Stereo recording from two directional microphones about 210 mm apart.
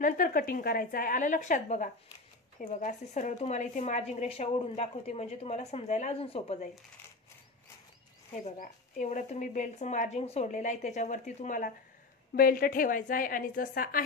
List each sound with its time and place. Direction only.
0.0 s speech: 40° left (ahead or behind)
8.5 s speech: 35° left (ahead or behind)